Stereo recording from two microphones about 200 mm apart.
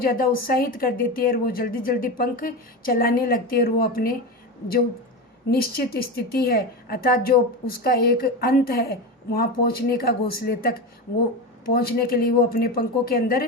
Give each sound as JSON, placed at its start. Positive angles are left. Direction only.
{"t": 0.0, "sound": "a woman's voice", "side_deg": 45}
{"t": 5.5, "sound": "a woman's voice", "side_deg": 50}